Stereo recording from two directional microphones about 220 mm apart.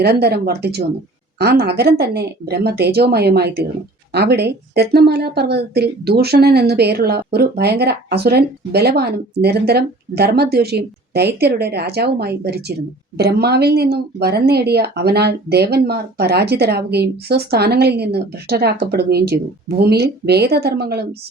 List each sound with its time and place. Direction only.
0.0 s speech: 45° right (ahead or behind)